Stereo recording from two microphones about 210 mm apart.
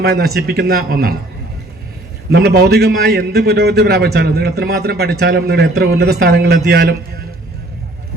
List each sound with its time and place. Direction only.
0.0 s a man's voice: 50° right (ahead or behind)
2.3 s a man's voice: 50° right (ahead or behind)